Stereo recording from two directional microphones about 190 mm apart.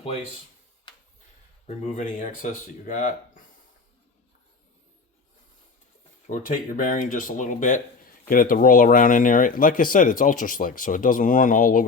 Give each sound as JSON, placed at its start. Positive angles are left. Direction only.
{"t": 1.6, "sound": "speech", "side_deg": 40}
{"t": 6.2, "sound": "speech", "side_deg": 45}